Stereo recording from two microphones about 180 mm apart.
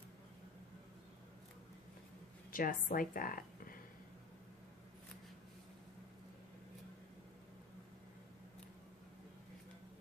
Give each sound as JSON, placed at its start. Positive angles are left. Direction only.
{"t": 2.5, "sound": "speech", "side_deg": 50}